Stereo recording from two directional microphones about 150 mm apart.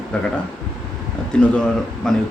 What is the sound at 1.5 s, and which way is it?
Speech, 5° left (ahead or behind).